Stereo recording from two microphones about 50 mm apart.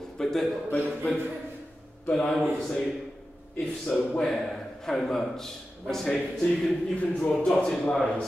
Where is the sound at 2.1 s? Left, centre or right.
Centre.